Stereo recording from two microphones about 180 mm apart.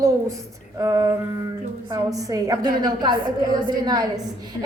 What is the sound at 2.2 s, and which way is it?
A woman's voice, 20° right (ahead or behind).